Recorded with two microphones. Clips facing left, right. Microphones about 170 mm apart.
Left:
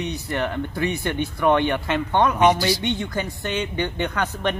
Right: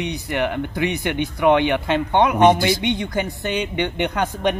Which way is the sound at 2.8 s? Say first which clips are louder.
Right 3 dB; 15° right (ahead or behind).